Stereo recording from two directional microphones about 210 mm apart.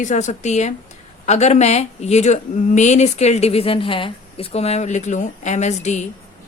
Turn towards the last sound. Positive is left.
turn(degrees=35)  # may be behind; listen again after turning